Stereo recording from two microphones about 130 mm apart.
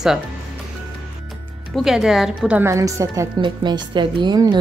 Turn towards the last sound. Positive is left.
turn(degrees=-35)  # may be behind; listen again after turning